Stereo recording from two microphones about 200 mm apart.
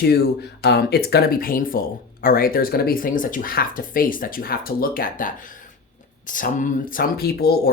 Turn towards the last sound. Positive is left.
turn(degrees=50)  # may be behind; listen again after turning